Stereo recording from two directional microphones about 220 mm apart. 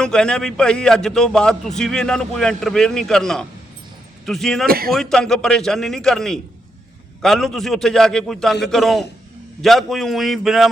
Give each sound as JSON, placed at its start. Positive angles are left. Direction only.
{"t": 0.0, "sound": "a man's voice", "side_deg": 5}
{"t": 4.6, "sound": "speech", "side_deg": -45}
{"t": 4.9, "sound": "a man's voice", "side_deg": 0}